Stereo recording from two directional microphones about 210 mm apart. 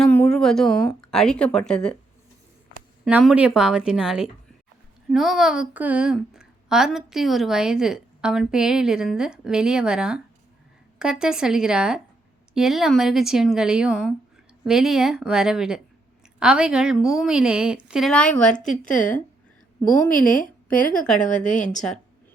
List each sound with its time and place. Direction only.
0.0 s a sound: 5° left (ahead or behind)
1.0 s a woman's voice: 5° left (ahead or behind)
3.0 s a woman's voice: 5° right (ahead or behind)
18.9 s a woman's voice: 40° left (ahead or behind)
21.8 s a woman's voice: 5° left (ahead or behind)